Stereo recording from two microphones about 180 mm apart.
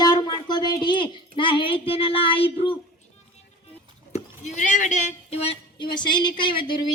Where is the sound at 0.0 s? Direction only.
25° left (ahead or behind).